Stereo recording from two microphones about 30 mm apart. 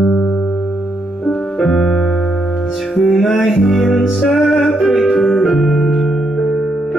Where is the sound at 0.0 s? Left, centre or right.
Left.